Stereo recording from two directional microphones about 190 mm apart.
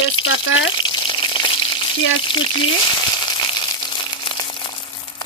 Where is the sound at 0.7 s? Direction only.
25° left (ahead or behind).